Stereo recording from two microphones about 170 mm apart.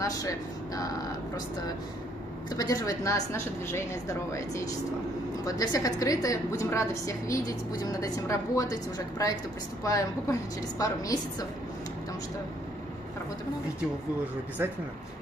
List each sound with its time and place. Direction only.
0.0 s speech: 20° left (ahead or behind)
2.5 s a woman's voice: 20° left (ahead or behind)
14.6 s speech: 15° right (ahead or behind)